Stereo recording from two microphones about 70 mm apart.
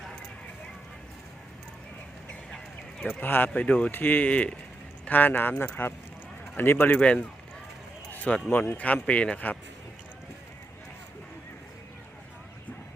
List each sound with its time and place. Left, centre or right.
3.2 s speech: left
3.5 s speech: centre
8.1 s a sound: left
8.4 s speech: left